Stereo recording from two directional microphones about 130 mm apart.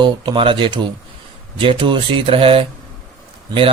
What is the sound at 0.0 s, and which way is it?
Speech, 35° right (ahead or behind).